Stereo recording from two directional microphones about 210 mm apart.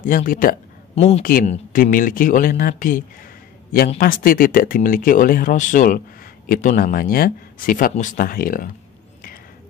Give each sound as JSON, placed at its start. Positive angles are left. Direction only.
{"t": 0.0, "sound": "speech", "side_deg": 40}
{"t": 4.0, "sound": "speech", "side_deg": 40}